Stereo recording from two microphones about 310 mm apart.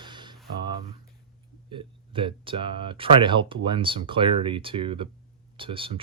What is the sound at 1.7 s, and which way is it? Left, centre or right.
Speech, centre.